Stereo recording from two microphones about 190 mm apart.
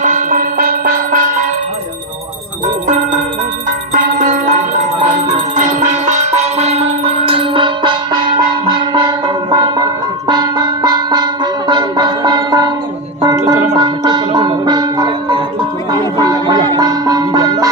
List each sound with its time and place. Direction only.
0.0 s music: 45° right (ahead or behind)
3.9 s music: 45° right (ahead or behind)
5.2 s a sound: 40° right (ahead or behind); by 7.9 s 25° right (ahead or behind)
8.9 s music: 25° right (ahead or behind)